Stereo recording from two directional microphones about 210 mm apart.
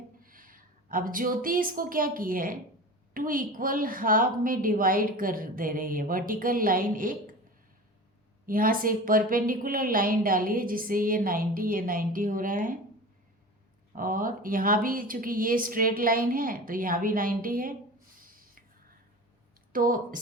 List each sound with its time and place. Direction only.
0.2 s a woman's voice: 40° right (ahead or behind)
8.4 s a woman's voice: 40° right (ahead or behind)
13.9 s a woman's voice: 40° right (ahead or behind)
18.2 s a sound: 40° right (ahead or behind)
19.7 s a woman's voice: 40° right (ahead or behind)